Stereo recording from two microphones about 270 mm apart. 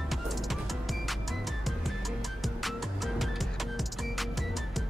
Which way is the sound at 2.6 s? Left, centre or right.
Centre.